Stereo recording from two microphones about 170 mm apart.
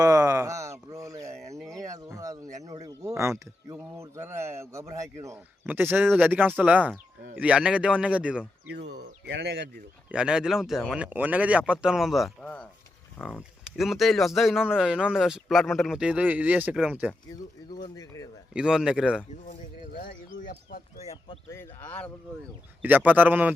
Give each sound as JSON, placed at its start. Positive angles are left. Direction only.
{"t": 0.0, "sound": "a sound", "side_deg": -20}
{"t": 1.5, "sound": "a sound", "side_deg": 0}
{"t": 1.8, "sound": "a sound", "side_deg": -20}
{"t": 3.8, "sound": "a man's voice", "side_deg": -15}
{"t": 8.7, "sound": "speech", "side_deg": -85}
{"t": 10.1, "sound": "speech", "side_deg": -5}
{"t": 13.2, "sound": "speech", "side_deg": -5}
{"t": 17.2, "sound": "speech", "side_deg": 25}
{"t": 18.5, "sound": "speech", "side_deg": -5}
{"t": 20.1, "sound": "a sound", "side_deg": 65}
{"t": 21.0, "sound": "speech", "side_deg": 40}
{"t": 21.5, "sound": "speech", "side_deg": 10}
{"t": 22.8, "sound": "a man's voice", "side_deg": -10}